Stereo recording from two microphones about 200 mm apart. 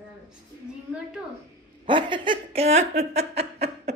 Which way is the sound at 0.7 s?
5° right (ahead or behind).